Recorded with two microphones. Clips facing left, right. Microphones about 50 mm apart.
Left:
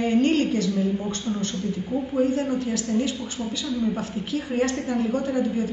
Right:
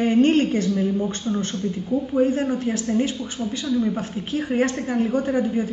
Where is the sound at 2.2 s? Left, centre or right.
Right.